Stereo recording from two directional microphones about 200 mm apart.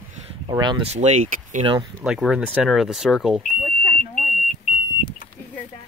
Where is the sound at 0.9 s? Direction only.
35° right (ahead or behind).